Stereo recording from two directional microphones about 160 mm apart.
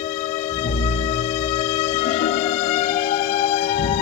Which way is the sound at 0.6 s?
40° left (ahead or behind).